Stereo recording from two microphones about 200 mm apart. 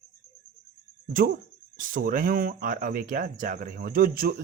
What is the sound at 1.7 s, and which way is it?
Speech, 40° right (ahead or behind).